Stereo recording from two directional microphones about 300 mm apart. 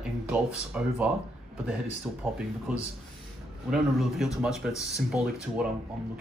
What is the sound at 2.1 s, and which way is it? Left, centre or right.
A man's voice, centre.